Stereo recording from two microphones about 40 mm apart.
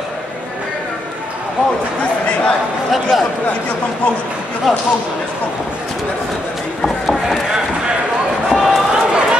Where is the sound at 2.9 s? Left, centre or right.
Centre.